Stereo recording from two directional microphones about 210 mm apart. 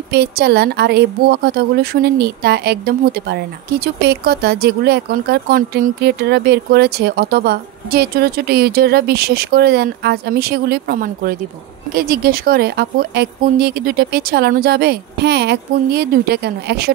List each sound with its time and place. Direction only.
0.1 s a woman's voice: 50° right (ahead or behind)